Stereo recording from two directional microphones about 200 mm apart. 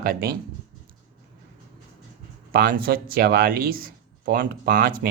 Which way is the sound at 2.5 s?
50° right (ahead or behind).